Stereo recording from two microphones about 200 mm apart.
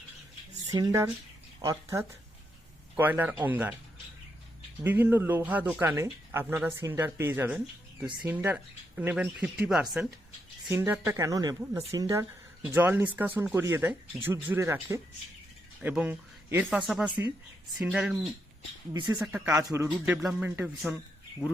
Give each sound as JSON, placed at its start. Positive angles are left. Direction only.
{"t": 0.7, "sound": "a woman's voice", "side_deg": -15}
{"t": 5.0, "sound": "a woman's voice", "side_deg": -10}